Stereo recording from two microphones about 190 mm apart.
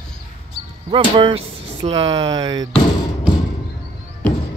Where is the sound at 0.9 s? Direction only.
30° right (ahead or behind).